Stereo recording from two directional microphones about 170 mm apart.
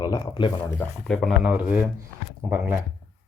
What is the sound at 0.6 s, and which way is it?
Speech, 5° left (ahead or behind).